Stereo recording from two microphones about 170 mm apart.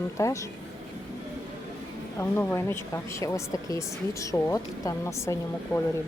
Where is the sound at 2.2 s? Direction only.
15° left (ahead or behind).